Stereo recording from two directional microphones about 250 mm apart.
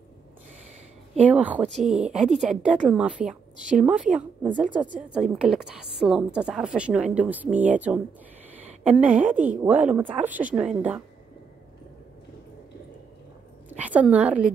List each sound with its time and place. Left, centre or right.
1.3 s a woman's voice: centre
13.7 s a woman's voice: centre